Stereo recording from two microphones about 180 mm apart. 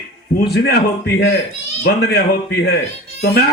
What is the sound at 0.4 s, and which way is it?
A man's voice, 65° left (ahead or behind).